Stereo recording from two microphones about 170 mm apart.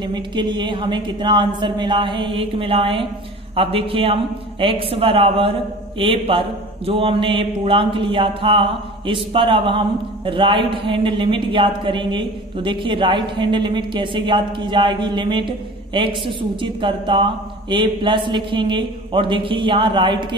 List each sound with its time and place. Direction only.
0.0 s mantra: 25° right (ahead or behind)
3.5 s a man's voice: 35° right (ahead or behind)
6.9 s mantra: 30° right (ahead or behind)